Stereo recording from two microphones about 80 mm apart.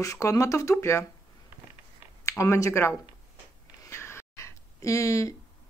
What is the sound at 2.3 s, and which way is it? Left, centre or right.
Speech, left.